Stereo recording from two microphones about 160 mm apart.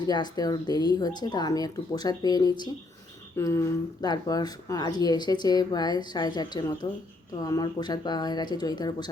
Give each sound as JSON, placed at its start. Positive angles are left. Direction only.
{"t": 0.1, "sound": "speech", "side_deg": 25}